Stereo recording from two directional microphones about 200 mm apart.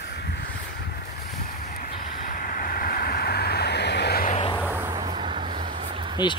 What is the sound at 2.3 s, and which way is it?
Vehicle, 45° left (ahead or behind).